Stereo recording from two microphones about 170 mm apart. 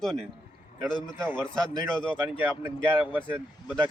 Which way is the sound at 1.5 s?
5° left (ahead or behind).